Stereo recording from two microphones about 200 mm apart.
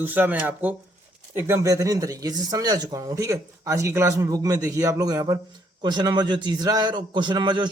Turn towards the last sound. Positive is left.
turn(degrees=-20)  # may be behind; listen again after turning